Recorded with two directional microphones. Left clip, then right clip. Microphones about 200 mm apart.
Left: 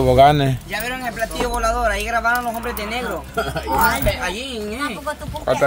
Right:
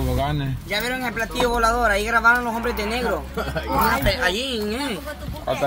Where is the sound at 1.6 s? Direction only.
40° right (ahead or behind).